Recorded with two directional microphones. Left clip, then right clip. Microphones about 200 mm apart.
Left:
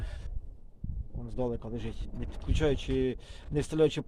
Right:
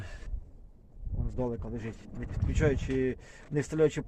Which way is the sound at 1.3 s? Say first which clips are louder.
Left 1 dB; centre (ahead or behind).